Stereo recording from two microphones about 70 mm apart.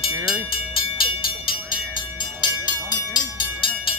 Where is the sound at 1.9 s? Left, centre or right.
Left.